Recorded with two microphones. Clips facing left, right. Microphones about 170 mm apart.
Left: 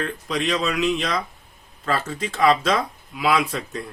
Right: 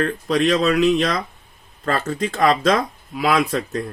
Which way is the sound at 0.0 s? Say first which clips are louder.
Right 7 dB; 40° right (ahead or behind).